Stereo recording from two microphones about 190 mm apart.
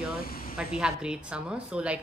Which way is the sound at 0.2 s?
50° left (ahead or behind).